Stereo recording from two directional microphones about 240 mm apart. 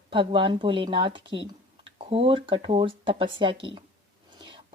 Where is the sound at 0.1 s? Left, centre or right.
Right.